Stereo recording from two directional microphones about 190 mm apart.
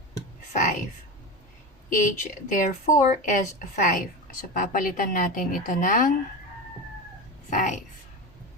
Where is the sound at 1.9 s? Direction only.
45° left (ahead or behind).